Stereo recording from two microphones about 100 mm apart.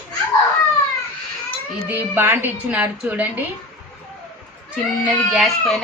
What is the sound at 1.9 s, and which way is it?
A woman's voice, 20° right (ahead or behind).